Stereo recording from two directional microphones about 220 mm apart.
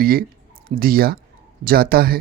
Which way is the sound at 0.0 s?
45° right (ahead or behind).